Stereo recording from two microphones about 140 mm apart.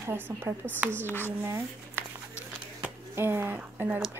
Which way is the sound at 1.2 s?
15° right (ahead or behind).